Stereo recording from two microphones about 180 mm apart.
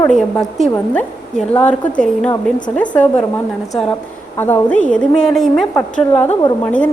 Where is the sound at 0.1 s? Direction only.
Centre (ahead or behind).